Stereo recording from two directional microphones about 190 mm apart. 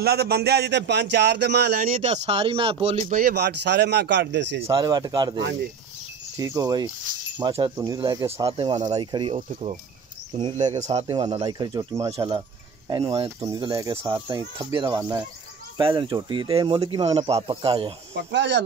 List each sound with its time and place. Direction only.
0.0 s speech: 60° right (ahead or behind)
1.8 s speech: 40° right (ahead or behind)
3.2 s speech: 55° right (ahead or behind)
4.6 s speech: 20° right (ahead or behind)
12.1 s a sound: 25° right (ahead or behind)
13.0 s speech: 25° right (ahead or behind)
18.1 s speech: 65° right (ahead or behind)